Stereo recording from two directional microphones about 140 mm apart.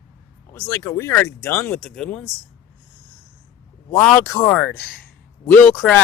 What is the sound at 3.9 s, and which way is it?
Speech, 10° left (ahead or behind).